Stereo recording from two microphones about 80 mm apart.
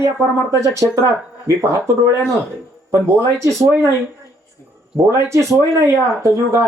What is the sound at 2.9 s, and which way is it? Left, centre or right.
Speech, right.